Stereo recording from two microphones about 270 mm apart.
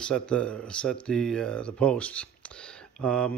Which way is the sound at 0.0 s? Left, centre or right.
Centre.